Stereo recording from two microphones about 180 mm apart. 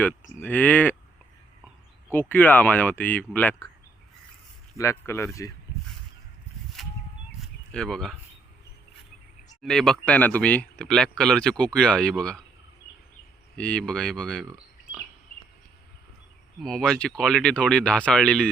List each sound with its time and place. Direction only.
0.3 s speech: 10° left (ahead or behind)
2.0 s speech: 10° left (ahead or behind)
4.8 s speech: 15° left (ahead or behind)
7.7 s speech: 5° left (ahead or behind)
9.6 s speech: centre (ahead or behind)
13.6 s speech: 5° left (ahead or behind)
16.6 s speech: centre (ahead or behind)